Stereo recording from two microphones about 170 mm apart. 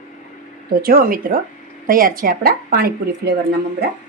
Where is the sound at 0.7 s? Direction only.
60° right (ahead or behind).